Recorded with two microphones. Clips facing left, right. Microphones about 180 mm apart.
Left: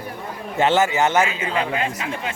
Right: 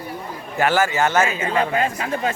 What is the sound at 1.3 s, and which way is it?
Speech, 45° right (ahead or behind).